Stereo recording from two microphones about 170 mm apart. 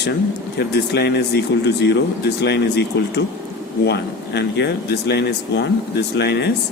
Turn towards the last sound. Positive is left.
turn(degrees=85)